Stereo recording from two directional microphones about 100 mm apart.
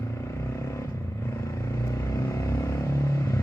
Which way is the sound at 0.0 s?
30° left (ahead or behind).